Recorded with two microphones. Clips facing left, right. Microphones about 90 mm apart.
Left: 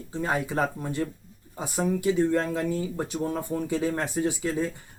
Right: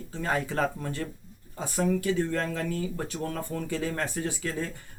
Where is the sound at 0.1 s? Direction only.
15° left (ahead or behind).